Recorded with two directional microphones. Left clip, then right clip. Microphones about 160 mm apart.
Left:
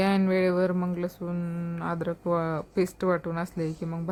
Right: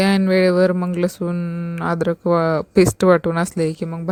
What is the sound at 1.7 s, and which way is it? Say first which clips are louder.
Speech: right 11 dB; 40° right (ahead or behind).